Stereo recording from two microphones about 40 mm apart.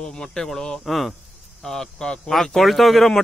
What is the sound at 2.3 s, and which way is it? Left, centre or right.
Speech, centre.